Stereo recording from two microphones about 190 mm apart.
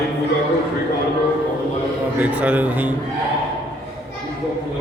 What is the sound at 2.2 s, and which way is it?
Speech, 5° right (ahead or behind).